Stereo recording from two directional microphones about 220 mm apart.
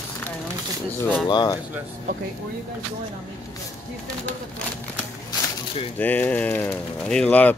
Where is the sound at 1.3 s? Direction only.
20° left (ahead or behind).